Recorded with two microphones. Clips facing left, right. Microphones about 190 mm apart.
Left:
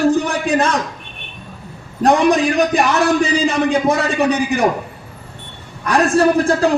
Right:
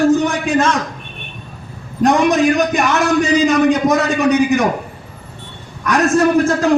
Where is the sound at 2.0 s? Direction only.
35° left (ahead or behind).